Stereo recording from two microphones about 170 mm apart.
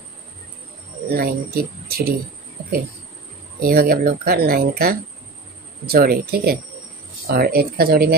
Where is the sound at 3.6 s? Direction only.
60° right (ahead or behind).